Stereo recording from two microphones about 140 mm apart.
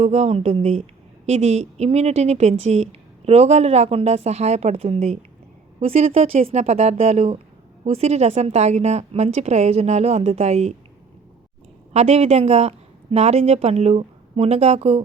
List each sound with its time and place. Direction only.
0.0 s a woman's voice: 50° right (ahead or behind)
11.9 s a woman's voice: 50° right (ahead or behind)